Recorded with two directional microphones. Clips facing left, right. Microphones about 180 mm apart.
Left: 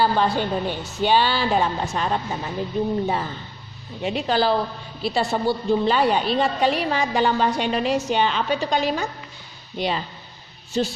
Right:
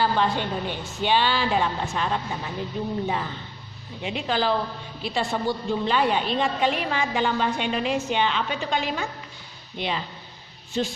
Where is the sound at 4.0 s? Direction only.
40° left (ahead or behind).